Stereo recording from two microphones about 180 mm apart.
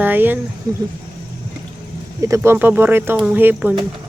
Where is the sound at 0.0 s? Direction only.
10° right (ahead or behind).